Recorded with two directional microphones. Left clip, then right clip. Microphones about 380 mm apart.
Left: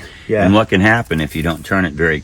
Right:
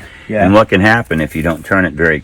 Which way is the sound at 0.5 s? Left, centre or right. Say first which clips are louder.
Right 6 dB; centre.